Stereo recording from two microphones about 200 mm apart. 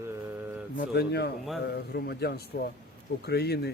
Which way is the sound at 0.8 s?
55° left (ahead or behind).